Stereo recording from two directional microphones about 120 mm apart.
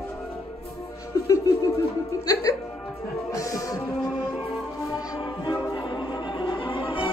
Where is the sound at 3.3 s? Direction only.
30° left (ahead or behind).